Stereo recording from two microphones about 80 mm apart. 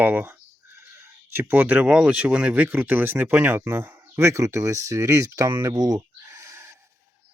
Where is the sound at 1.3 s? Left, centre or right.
Right.